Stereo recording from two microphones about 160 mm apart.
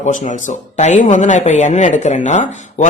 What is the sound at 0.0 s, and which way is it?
Speech, 50° left (ahead or behind).